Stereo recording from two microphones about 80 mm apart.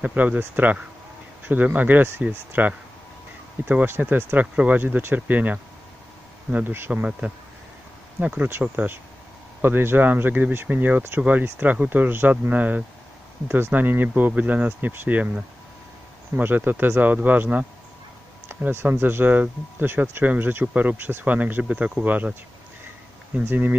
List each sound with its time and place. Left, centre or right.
0.0 s speech: centre
6.9 s speech: centre
16.3 s speech: right
23.4 s speech: right